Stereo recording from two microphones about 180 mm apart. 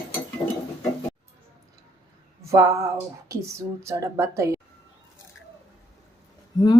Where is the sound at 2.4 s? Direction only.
15° right (ahead or behind).